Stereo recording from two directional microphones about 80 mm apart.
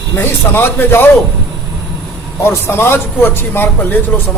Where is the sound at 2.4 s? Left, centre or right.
Left.